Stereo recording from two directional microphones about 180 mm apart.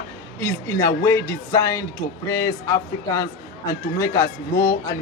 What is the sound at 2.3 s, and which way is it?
Speech, 55° left (ahead or behind).